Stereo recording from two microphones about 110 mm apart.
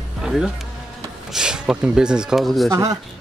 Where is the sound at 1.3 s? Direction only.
5° right (ahead or behind).